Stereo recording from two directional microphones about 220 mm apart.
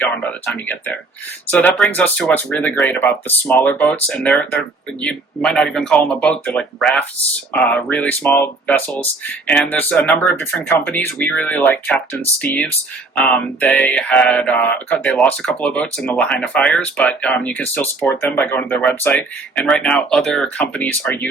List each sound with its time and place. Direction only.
0.0 s speech: 10° left (ahead or behind)